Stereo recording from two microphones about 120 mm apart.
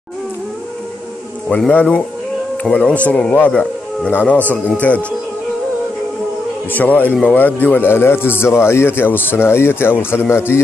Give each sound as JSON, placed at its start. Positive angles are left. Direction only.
{"t": 1.7, "sound": "speech", "side_deg": 10}
{"t": 6.7, "sound": "speech", "side_deg": 15}